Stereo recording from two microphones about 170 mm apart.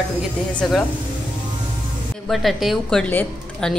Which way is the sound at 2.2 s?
Centre (ahead or behind).